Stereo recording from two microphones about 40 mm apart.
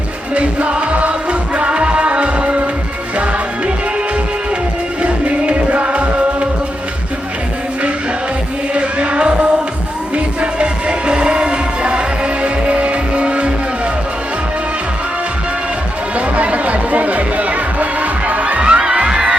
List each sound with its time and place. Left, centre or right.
0.3 s music: right
5.0 s music: right
8.7 s music: right
16.1 s music: right